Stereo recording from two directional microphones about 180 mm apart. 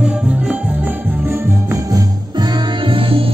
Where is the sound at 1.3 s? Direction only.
15° right (ahead or behind).